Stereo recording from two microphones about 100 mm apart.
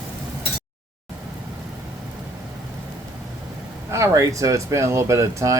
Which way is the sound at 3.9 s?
30° right (ahead or behind).